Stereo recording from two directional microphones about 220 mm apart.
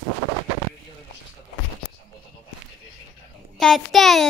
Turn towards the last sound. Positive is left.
turn(degrees=0)  # may be behind; listen again after turning